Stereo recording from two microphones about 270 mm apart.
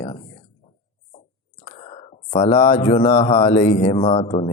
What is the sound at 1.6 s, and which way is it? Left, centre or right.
Speech, left.